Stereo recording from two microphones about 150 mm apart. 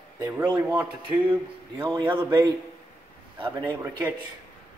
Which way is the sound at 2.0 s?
35° right (ahead or behind).